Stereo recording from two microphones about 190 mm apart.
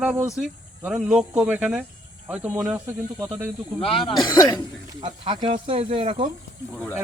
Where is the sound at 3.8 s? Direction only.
30° left (ahead or behind).